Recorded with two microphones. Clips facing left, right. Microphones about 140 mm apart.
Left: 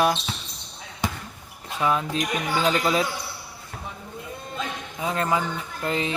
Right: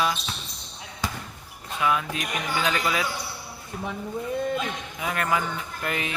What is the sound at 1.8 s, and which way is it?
Speech, 30° left (ahead or behind).